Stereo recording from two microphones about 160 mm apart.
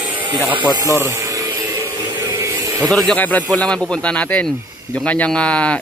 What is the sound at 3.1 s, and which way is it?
Speech, 10° left (ahead or behind).